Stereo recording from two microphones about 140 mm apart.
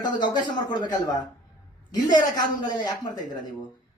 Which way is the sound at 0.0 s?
30° left (ahead or behind).